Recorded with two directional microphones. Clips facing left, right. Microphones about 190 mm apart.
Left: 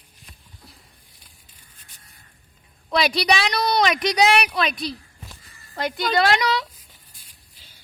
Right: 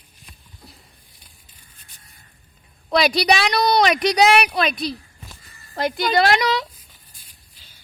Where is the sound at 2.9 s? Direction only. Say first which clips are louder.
Right 3 dB; 35° right (ahead or behind).